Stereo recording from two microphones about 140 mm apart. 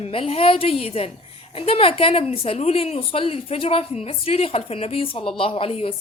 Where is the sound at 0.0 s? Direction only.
45° left (ahead or behind).